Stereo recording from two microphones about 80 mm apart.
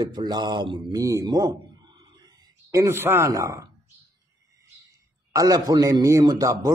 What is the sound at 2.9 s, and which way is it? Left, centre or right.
Speech, right.